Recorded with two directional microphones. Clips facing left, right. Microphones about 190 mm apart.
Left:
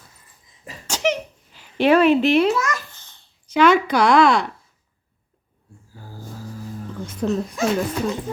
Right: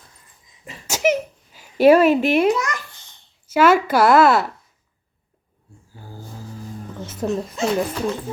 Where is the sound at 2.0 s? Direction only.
10° right (ahead or behind).